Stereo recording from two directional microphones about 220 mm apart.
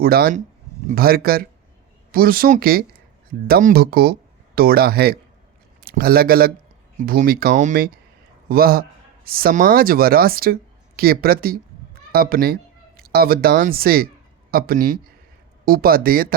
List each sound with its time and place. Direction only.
0.0 s a man's voice: 45° right (ahead or behind)